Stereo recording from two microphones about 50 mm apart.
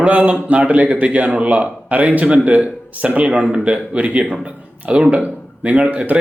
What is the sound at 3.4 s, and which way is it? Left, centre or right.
A man's voice, centre.